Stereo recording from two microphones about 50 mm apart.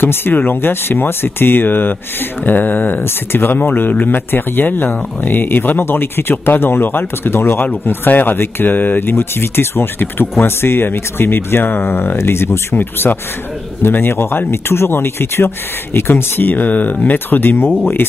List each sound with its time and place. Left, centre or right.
0.0 s speech: left
9.1 s speech: left
12.7 s speech: left